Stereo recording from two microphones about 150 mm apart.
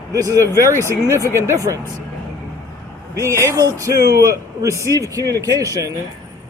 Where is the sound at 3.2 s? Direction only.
20° right (ahead or behind).